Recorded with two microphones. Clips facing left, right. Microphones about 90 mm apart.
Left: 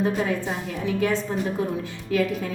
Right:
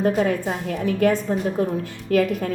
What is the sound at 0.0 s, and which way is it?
A woman's voice, 55° right (ahead or behind).